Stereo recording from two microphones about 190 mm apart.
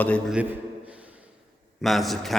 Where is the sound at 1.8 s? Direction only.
Centre (ahead or behind).